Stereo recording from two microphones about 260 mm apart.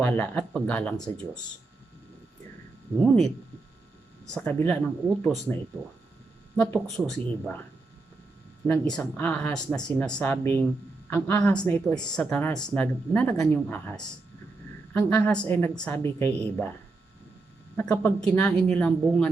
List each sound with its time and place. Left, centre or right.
0.0 s speech: centre
3.0 s speech: centre
4.4 s speech: centre
6.6 s speech: centre
8.9 s speech: centre
17.7 s speech: centre